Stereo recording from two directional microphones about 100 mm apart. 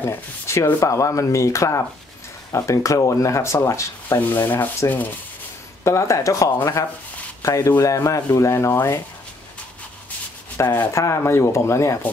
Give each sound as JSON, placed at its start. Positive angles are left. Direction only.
{"t": 0.0, "sound": "speech", "side_deg": 25}
{"t": 10.6, "sound": "speech", "side_deg": 25}